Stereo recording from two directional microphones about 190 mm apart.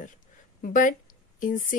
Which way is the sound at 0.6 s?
45° left (ahead or behind).